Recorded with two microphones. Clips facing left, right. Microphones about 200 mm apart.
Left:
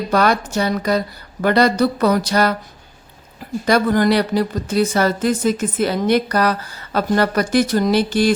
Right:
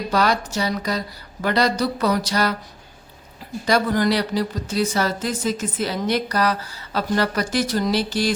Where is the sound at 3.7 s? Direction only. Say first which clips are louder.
Left 4 dB; 55° left (ahead or behind).